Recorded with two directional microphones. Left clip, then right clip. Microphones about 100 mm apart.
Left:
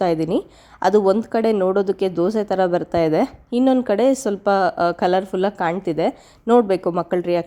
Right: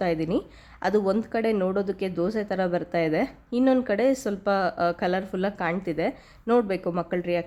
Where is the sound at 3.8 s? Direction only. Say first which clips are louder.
Left 6 dB; 35° left (ahead or behind).